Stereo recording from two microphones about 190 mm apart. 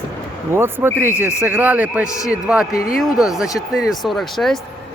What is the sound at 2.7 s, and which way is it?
Speech, 50° left (ahead or behind).